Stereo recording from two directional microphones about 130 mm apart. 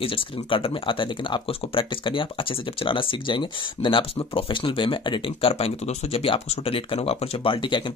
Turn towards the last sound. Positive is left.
turn(degrees=40)  # may be behind; listen again after turning